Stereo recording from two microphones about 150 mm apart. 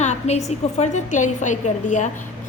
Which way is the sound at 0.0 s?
50° left (ahead or behind).